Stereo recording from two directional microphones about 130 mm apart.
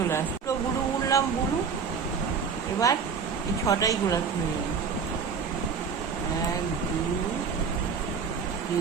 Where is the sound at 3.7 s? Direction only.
25° left (ahead or behind).